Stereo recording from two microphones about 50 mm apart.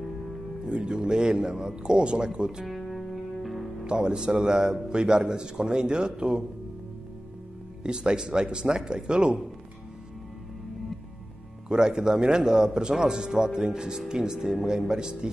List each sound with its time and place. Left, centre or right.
0.7 s a man's voice: right
2.8 s music: centre
3.8 s a man's voice: centre
7.8 s a man's voice: centre
11.7 s a man's voice: centre